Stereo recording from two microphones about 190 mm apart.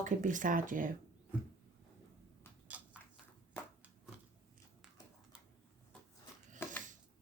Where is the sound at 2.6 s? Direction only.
10° right (ahead or behind).